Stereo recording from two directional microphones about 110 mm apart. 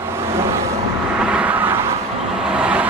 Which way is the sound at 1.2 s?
10° right (ahead or behind).